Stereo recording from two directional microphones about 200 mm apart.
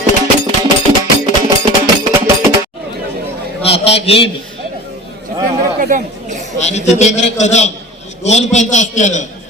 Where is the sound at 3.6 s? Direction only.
30° left (ahead or behind).